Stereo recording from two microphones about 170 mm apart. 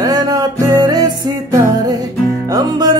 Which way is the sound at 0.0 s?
20° right (ahead or behind).